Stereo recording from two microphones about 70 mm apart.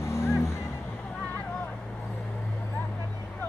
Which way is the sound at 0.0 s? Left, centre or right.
Left.